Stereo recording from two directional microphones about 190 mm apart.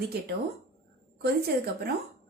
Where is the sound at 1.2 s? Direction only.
55° right (ahead or behind).